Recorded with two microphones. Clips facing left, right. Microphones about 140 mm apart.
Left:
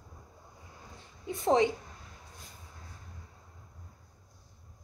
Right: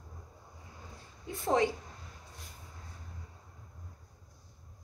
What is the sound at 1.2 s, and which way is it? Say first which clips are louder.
Speech: left 3 dB; 20° left (ahead or behind).